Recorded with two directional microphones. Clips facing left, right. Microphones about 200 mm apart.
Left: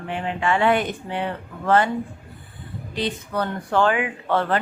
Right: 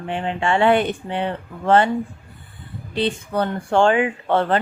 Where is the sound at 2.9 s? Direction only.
30° right (ahead or behind).